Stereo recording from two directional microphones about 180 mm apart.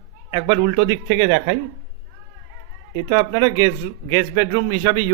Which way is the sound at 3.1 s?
25° right (ahead or behind).